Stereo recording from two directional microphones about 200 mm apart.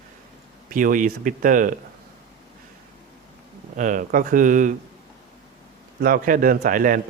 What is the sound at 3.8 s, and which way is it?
Speech, 40° right (ahead or behind).